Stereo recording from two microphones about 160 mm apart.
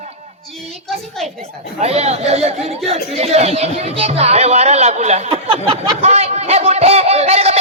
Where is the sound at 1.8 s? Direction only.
40° right (ahead or behind).